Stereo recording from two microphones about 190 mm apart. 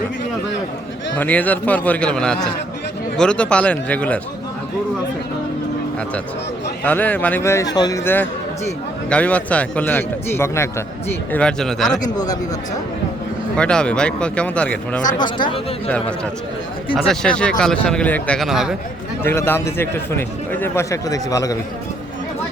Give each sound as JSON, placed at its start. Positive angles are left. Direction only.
{"t": 1.1, "sound": "a man's voice", "side_deg": 10}
{"t": 6.8, "sound": "a man's voice", "side_deg": 10}
{"t": 12.1, "sound": "speech", "side_deg": 20}
{"t": 13.6, "sound": "a man's voice", "side_deg": 5}
{"t": 15.2, "sound": "speech", "side_deg": 25}
{"t": 17.1, "sound": "a man's voice", "side_deg": 5}
{"t": 19.2, "sound": "a man's voice", "side_deg": 10}